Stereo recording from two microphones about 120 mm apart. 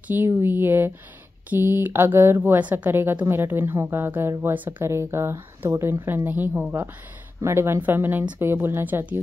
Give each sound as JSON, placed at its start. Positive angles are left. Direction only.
{"t": 0.1, "sound": "speech", "side_deg": -15}